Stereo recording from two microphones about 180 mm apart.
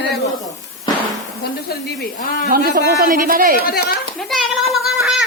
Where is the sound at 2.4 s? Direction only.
55° right (ahead or behind).